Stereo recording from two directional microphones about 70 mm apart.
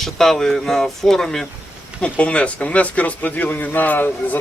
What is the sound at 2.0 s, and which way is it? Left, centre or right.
A man's voice, centre.